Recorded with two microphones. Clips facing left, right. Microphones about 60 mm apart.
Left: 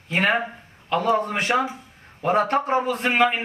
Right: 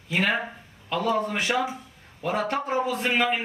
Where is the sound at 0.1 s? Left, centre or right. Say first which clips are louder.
Left 4 dB; left.